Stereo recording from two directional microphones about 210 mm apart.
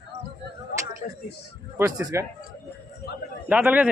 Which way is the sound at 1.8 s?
15° right (ahead or behind).